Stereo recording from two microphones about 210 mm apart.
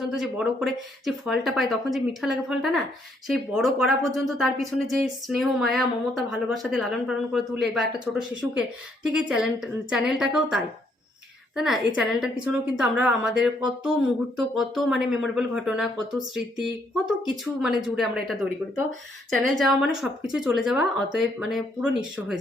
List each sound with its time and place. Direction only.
0.0 s speech: centre (ahead or behind)